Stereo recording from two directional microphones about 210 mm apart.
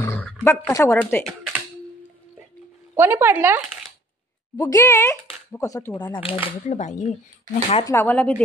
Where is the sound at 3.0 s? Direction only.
10° right (ahead or behind).